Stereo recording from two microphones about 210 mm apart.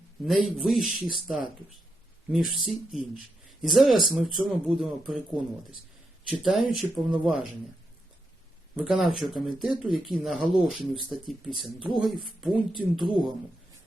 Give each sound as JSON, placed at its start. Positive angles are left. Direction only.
{"t": 0.3, "sound": "speech", "side_deg": 0}
{"t": 6.2, "sound": "speech", "side_deg": 0}
{"t": 8.7, "sound": "speech", "side_deg": 0}